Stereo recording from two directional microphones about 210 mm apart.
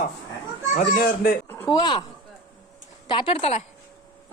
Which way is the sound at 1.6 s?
20° left (ahead or behind).